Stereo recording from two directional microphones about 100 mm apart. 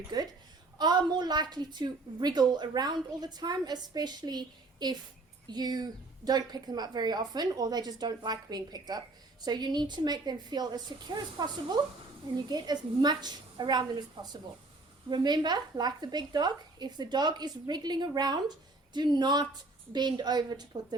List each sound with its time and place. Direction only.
0.1 s a woman's voice: 45° right (ahead or behind)